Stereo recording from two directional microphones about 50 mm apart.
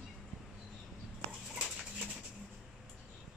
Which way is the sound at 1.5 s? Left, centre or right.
Centre.